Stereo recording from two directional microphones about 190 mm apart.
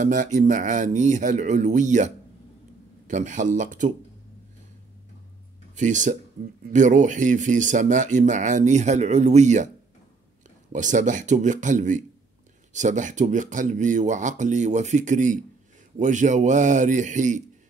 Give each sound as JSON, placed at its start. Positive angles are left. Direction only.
{"t": 0.0, "sound": "speech", "side_deg": -40}
{"t": 5.8, "sound": "speech", "side_deg": -40}
{"t": 10.7, "sound": "speech", "side_deg": -40}